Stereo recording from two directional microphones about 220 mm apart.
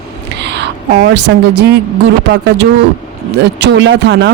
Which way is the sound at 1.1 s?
50° right (ahead or behind).